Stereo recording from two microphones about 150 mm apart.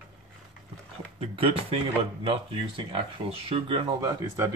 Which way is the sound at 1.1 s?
40° right (ahead or behind).